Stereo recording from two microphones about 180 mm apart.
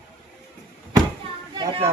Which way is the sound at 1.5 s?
30° right (ahead or behind).